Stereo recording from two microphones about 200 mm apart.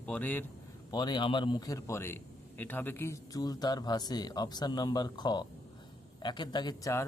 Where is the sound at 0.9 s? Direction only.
20° left (ahead or behind).